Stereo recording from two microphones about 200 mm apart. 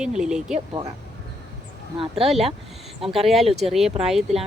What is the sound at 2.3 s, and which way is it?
Speech, centre (ahead or behind).